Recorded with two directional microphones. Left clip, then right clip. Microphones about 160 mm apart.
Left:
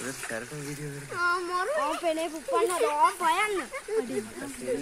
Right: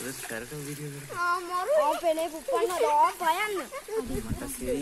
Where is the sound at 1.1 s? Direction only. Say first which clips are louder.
Left 1 dB; 70° left (ahead or behind).